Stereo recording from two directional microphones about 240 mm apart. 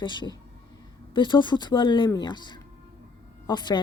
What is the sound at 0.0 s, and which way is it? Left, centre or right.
Speech, centre.